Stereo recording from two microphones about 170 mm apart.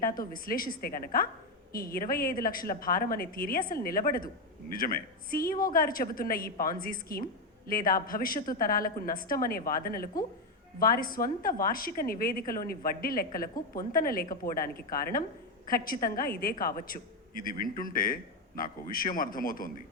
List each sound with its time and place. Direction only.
0.0 s a woman's voice: 55° left (ahead or behind)